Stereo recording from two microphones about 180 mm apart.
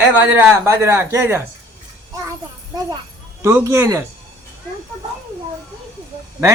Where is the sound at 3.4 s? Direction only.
15° right (ahead or behind).